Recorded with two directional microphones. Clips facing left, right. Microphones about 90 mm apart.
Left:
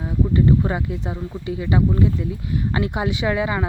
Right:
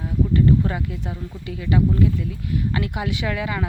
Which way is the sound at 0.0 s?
25° left (ahead or behind).